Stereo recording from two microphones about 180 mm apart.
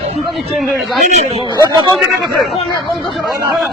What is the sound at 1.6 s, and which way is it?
Speech, 25° right (ahead or behind).